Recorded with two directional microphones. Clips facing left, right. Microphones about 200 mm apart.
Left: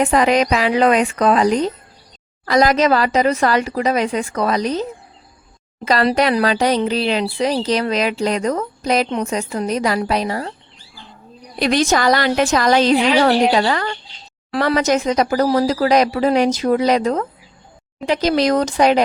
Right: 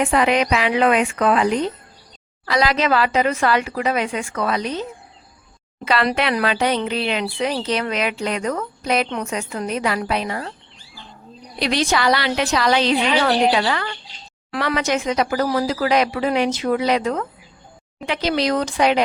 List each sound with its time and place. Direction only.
0.0 s a woman's voice: 40° left (ahead or behind)
9.0 s a woman's voice: 25° left (ahead or behind)
11.6 s a woman's voice: 45° left (ahead or behind)